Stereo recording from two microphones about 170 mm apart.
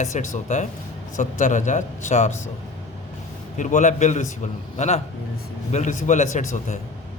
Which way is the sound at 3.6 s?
45° left (ahead or behind).